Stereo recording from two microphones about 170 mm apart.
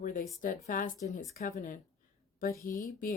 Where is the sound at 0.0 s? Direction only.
55° left (ahead or behind).